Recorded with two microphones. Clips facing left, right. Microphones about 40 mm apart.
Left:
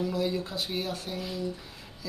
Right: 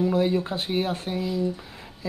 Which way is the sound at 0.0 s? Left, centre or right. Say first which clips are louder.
Right 7 dB; right.